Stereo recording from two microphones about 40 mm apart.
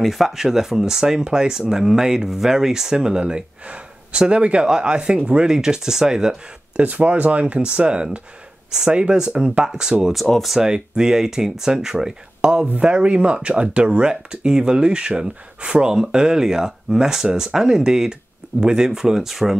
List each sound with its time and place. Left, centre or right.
0.0 s speech: centre; by 5.5 s right
5.5 s speech: centre
6.8 s speech: right; by 9.9 s centre
10.3 s speech: centre
10.6 s speech: centre